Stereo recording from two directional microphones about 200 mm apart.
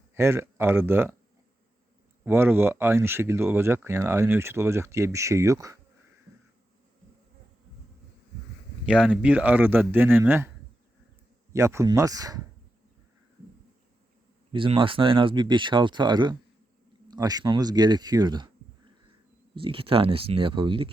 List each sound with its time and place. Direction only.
0.1 s speech: 15° right (ahead or behind)
2.2 s speech: 10° right (ahead or behind)
8.9 s speech: 5° right (ahead or behind)
11.5 s speech: 15° right (ahead or behind)
14.5 s speech: 25° right (ahead or behind)
19.5 s speech: 25° right (ahead or behind)